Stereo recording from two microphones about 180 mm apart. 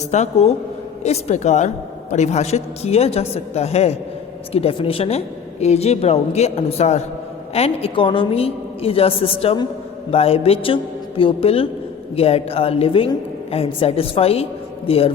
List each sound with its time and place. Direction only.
0.1 s a woman's voice: 35° left (ahead or behind)